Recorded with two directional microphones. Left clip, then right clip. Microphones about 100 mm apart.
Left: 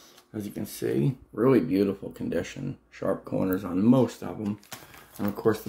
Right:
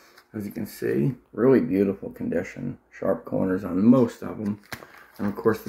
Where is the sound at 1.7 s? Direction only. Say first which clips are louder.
Right 2 dB; 30° left (ahead or behind).